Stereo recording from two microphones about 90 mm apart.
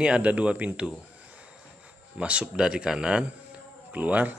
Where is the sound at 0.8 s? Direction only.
10° right (ahead or behind).